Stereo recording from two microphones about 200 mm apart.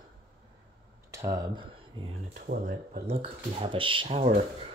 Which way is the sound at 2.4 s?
45° right (ahead or behind).